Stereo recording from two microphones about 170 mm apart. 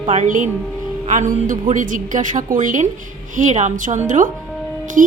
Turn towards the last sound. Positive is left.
turn(degrees=-50)  # may be behind; listen again after turning